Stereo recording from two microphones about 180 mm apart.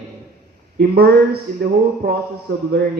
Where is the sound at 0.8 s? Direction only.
60° right (ahead or behind).